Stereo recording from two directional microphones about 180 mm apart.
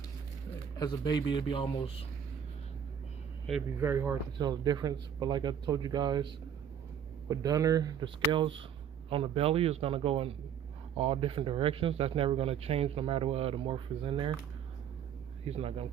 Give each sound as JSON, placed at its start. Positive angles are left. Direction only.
{"t": 0.8, "sound": "a man's voice", "side_deg": 25}
{"t": 3.8, "sound": "a man's voice", "side_deg": -15}
{"t": 7.3, "sound": "a man's voice", "side_deg": -20}
{"t": 15.4, "sound": "speech", "side_deg": -35}